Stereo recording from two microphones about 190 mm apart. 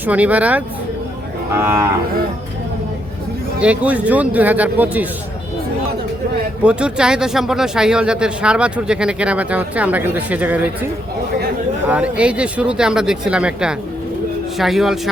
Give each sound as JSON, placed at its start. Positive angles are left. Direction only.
{"t": 0.0, "sound": "speech", "side_deg": -10}
{"t": 1.6, "sound": "speech", "side_deg": -10}
{"t": 3.6, "sound": "speech", "side_deg": -5}
{"t": 6.6, "sound": "speech", "side_deg": -5}
{"t": 11.9, "sound": "speech", "side_deg": -5}